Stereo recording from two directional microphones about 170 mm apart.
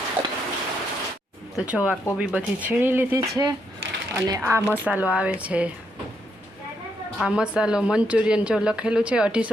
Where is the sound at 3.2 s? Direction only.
25° right (ahead or behind).